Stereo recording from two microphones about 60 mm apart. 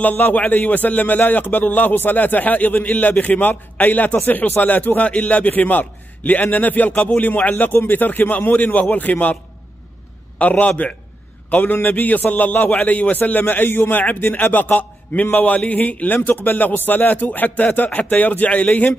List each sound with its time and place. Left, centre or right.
0.0 s a man's voice: left
6.9 s a man's voice: centre
7.2 s a man's voice: left
10.4 s a man's voice: left